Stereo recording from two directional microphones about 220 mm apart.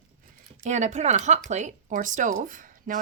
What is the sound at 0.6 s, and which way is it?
Speech, 30° right (ahead or behind).